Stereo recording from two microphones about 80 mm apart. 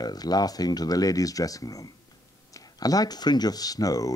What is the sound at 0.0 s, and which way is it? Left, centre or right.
Speech, left.